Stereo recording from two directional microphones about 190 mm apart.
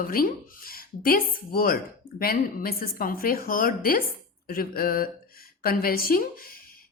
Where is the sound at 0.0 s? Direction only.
50° left (ahead or behind).